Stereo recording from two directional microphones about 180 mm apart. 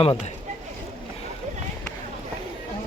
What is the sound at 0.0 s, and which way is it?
Speech, 35° left (ahead or behind).